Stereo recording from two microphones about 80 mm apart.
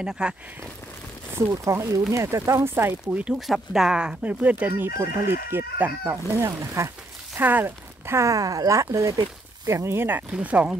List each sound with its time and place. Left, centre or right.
0.0 s speech: centre
1.5 s speech: right
2.7 s speech: right
3.3 s speech: centre; by 6.9 s right
7.3 s speech: right
10.3 s speech: centre